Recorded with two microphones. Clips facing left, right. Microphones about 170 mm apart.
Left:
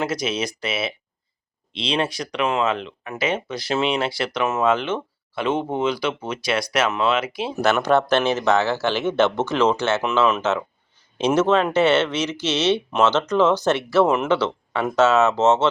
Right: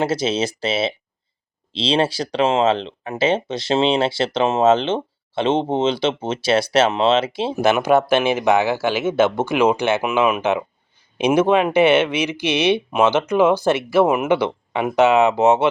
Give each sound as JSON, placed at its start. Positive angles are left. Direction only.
{"t": 0.0, "sound": "speech", "side_deg": -30}
{"t": 7.5, "sound": "speech", "side_deg": -15}